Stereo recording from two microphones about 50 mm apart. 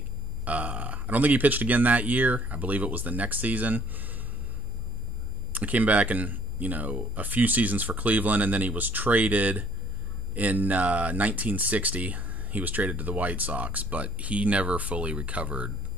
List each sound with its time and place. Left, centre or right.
0.5 s speech: right
5.5 s speech: right